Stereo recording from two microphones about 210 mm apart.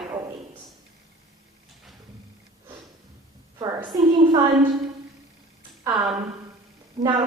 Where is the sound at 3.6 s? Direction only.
20° right (ahead or behind).